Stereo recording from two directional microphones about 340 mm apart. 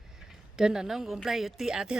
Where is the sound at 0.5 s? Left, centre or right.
Centre.